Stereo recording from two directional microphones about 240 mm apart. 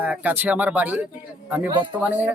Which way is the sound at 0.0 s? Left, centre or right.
Centre.